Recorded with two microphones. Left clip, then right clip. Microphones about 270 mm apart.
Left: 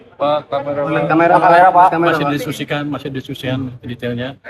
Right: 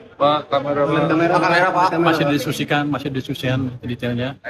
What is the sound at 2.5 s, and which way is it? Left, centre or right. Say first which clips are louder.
A man's voice: right 1 dB; centre.